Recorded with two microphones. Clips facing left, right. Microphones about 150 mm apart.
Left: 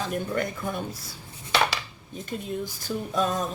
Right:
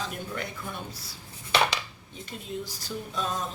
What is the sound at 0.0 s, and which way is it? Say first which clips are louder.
Speech: left 7 dB; 50° left (ahead or behind).